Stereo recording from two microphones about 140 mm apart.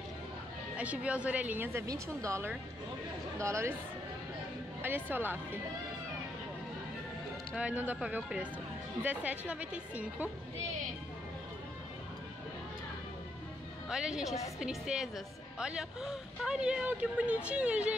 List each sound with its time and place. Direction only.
0.7 s speech: 10° right (ahead or behind)
5.1 s speech: 15° right (ahead or behind)
7.5 s speech: 10° right (ahead or behind)
13.8 s a woman's voice: 5° right (ahead or behind)